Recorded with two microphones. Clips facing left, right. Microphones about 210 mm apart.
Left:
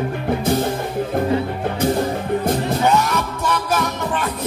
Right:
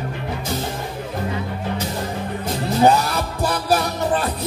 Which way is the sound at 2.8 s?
35° right (ahead or behind).